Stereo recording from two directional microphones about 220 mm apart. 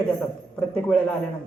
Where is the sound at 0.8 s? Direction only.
5° left (ahead or behind).